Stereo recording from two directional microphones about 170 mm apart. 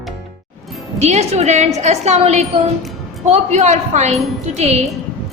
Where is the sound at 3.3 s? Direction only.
40° right (ahead or behind).